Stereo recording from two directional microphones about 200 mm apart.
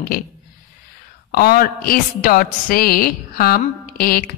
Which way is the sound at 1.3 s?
50° left (ahead or behind).